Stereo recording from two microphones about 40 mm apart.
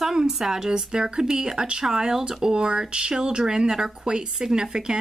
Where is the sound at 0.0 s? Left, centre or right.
Centre.